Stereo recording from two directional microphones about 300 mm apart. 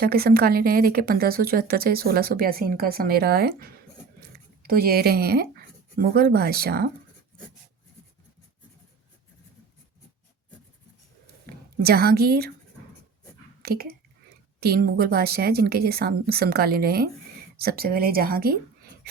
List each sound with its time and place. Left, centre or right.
0.0 s speech: right
11.4 s a woman's voice: right
13.6 s speech: right